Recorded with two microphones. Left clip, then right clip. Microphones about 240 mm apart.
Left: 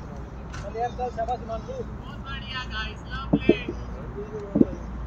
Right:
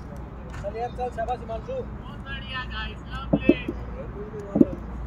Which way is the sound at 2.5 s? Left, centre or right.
Centre.